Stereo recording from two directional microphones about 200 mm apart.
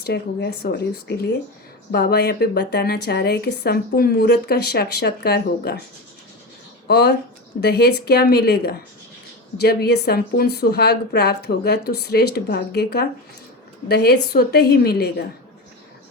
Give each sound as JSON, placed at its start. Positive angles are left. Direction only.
{"t": 0.0, "sound": "a woman's voice", "side_deg": 55}
{"t": 6.8, "sound": "a woman's voice", "side_deg": 55}